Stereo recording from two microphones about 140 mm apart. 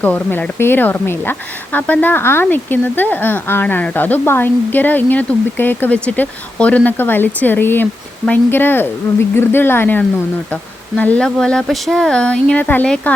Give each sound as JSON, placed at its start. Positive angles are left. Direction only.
{"t": 0.0, "sound": "a woman's voice", "side_deg": 10}